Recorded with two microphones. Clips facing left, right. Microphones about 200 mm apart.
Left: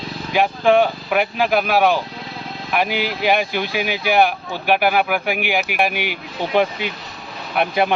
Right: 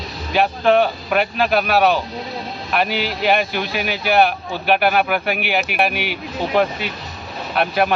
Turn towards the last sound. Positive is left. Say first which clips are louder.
# even
turn(degrees=15)  # may be behind; listen again after turning